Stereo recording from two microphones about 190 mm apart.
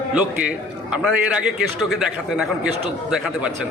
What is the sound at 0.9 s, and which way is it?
A man's voice, 5° right (ahead or behind).